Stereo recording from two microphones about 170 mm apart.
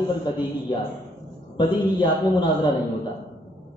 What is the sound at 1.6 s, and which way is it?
A man's voice, 25° left (ahead or behind).